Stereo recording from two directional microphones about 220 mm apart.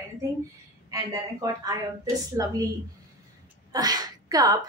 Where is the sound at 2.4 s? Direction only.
15° right (ahead or behind).